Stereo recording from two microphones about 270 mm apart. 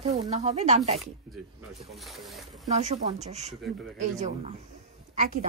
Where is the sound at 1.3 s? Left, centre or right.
Centre.